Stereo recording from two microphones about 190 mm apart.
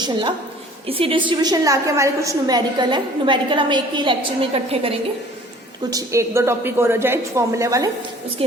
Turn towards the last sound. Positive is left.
turn(degrees=-15)  # may be behind; listen again after turning